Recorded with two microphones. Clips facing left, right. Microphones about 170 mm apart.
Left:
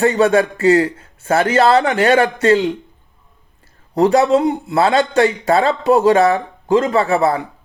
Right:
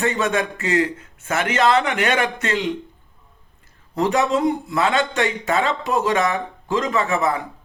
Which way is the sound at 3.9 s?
35° left (ahead or behind).